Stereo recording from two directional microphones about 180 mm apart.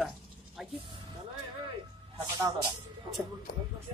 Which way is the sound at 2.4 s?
15° right (ahead or behind).